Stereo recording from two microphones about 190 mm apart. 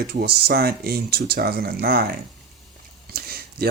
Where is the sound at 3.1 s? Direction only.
55° right (ahead or behind).